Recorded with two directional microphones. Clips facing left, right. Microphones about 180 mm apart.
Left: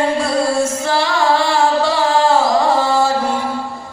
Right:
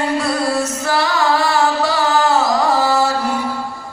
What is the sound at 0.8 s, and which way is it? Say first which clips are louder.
Carnatic music: left 1 dB; 25° left (ahead or behind).